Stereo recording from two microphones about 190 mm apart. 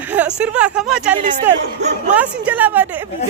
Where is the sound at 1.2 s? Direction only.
40° right (ahead or behind).